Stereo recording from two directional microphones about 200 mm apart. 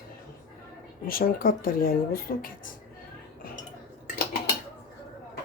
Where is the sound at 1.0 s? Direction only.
45° left (ahead or behind).